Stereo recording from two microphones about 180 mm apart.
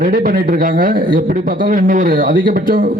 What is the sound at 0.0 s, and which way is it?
A man's voice, 50° right (ahead or behind).